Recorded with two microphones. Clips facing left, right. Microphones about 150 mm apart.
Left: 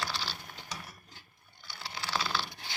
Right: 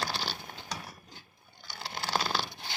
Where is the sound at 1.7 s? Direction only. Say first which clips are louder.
Right 3 dB; 45° right (ahead or behind).